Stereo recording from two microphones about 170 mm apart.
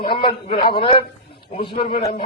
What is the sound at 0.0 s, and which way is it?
A man's voice, 30° left (ahead or behind).